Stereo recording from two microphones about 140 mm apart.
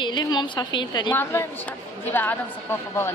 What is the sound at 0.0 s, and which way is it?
A woman's voice, 30° left (ahead or behind).